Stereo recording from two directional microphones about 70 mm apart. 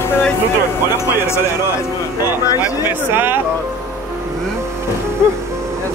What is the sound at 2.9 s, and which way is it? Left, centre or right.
Speech, right.